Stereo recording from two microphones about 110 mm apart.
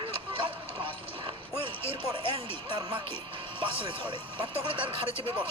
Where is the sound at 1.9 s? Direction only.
50° right (ahead or behind).